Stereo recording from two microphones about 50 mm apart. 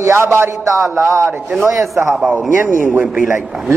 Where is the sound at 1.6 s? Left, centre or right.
Right.